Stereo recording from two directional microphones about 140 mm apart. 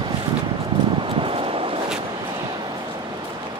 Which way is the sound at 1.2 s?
40° right (ahead or behind).